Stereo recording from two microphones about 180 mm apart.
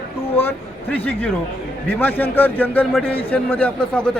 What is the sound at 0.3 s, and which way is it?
A man's voice, 10° left (ahead or behind).